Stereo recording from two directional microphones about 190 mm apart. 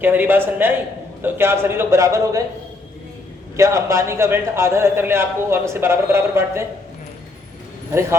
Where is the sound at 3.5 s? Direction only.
15° right (ahead or behind).